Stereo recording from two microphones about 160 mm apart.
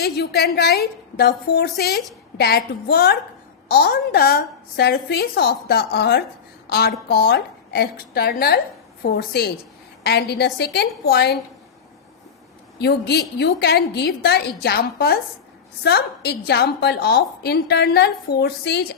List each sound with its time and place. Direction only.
0.0 s a woman's voice: 90° left
1.3 s a woman's voice: 75° left (ahead or behind)
6.7 s a woman's voice: 80° left
10.0 s a woman's voice: 90° left
12.8 s a woman's voice: 90° left
15.8 s a woman's voice: 90° left